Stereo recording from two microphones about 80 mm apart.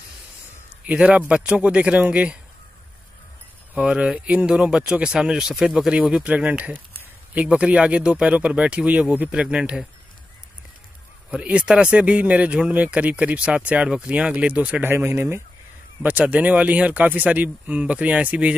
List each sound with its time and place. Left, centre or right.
0.8 s speech: centre
3.7 s speech: centre
11.2 s speech: centre
14.9 s speech: right